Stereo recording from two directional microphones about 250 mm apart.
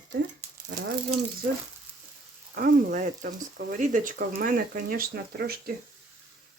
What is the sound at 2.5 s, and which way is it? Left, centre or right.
Speech, right.